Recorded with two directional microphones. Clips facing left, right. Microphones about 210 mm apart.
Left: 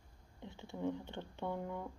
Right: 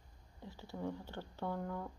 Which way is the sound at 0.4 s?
20° left (ahead or behind).